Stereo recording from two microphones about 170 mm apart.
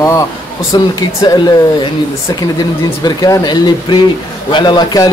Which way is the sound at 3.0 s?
20° left (ahead or behind).